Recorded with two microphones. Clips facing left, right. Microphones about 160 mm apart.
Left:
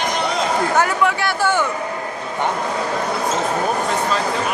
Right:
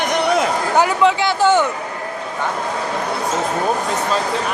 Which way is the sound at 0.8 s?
20° right (ahead or behind).